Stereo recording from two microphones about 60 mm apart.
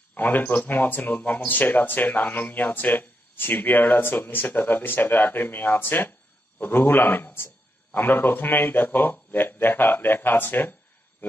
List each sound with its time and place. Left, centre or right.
0.1 s speech: left